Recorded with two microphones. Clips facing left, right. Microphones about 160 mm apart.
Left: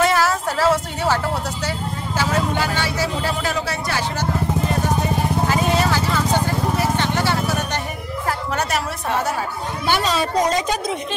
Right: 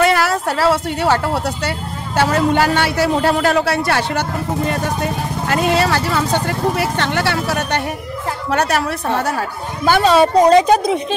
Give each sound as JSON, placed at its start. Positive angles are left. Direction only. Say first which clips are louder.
{"t": 0.0, "sound": "a woman's voice", "louder": "right 3 dB", "side_deg": -65}
{"t": 9.8, "sound": "a woman's voice", "louder": "right 9 dB", "side_deg": -55}